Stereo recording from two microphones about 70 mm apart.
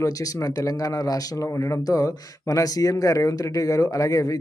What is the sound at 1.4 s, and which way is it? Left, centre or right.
Speech, left.